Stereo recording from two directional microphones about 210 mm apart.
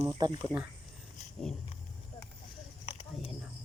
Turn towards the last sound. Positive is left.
turn(degrees=30)  # may be behind; listen again after turning